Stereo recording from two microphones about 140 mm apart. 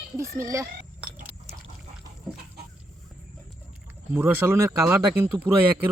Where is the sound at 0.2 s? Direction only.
20° right (ahead or behind).